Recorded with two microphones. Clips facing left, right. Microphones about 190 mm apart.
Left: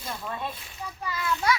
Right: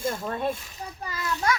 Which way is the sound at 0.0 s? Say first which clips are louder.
Right 7 dB; 45° right (ahead or behind).